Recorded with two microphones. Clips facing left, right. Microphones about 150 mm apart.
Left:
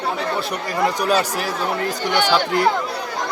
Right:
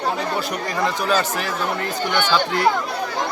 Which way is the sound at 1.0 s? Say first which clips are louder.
Left 2 dB; 40° left (ahead or behind).